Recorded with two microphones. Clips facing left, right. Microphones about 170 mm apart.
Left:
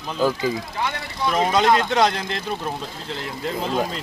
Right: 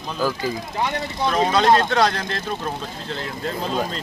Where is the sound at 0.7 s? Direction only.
20° right (ahead or behind).